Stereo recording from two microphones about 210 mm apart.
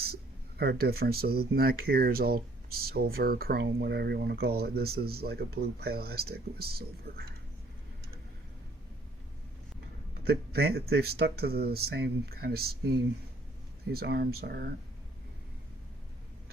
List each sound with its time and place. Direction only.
0.0 s speech: 50° right (ahead or behind)
10.2 s speech: 50° right (ahead or behind)
13.9 s speech: 50° right (ahead or behind)